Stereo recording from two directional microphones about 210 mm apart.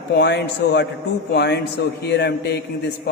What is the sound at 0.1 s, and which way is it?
A man's voice, 55° left (ahead or behind).